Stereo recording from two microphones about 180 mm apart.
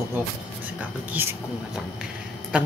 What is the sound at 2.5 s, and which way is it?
Speech, 5° right (ahead or behind).